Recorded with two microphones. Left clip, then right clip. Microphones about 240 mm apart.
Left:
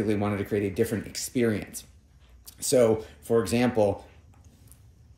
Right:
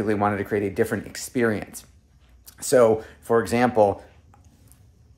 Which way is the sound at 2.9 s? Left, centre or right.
Centre.